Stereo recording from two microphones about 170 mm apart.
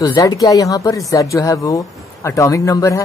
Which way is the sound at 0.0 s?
25° left (ahead or behind).